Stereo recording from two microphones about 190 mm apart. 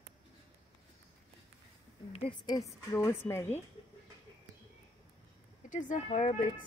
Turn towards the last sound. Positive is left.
turn(degrees=40)  # may be behind; listen again after turning